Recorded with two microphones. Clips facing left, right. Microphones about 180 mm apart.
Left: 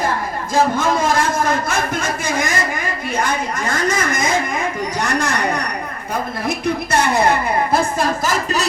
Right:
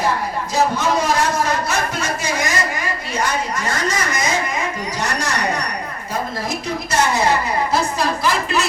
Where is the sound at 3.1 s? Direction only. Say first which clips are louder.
Even; 55° left (ahead or behind).